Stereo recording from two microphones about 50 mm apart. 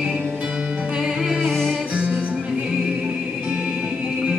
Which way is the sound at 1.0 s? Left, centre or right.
Centre.